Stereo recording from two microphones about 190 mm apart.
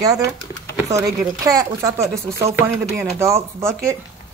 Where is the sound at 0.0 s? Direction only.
20° right (ahead or behind).